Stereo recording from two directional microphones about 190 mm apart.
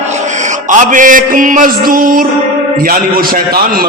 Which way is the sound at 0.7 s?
40° right (ahead or behind).